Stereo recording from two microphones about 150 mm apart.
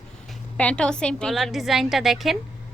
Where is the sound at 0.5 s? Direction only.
5° left (ahead or behind).